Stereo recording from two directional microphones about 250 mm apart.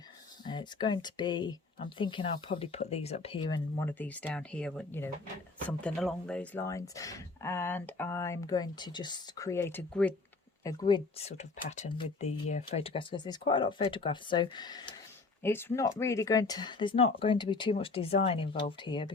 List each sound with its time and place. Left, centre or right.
0.4 s speech: centre